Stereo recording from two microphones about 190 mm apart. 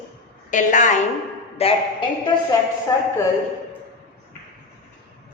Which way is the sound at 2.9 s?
20° left (ahead or behind).